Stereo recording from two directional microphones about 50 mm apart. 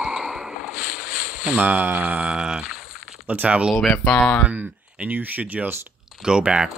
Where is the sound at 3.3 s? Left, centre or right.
Right.